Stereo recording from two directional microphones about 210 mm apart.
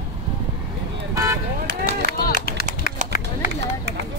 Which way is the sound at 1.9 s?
45° left (ahead or behind).